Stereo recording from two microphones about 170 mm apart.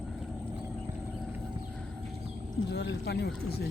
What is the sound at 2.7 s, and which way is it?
Speech, 75° left (ahead or behind).